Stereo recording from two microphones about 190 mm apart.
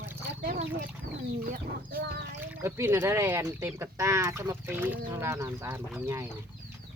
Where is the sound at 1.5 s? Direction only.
50° right (ahead or behind).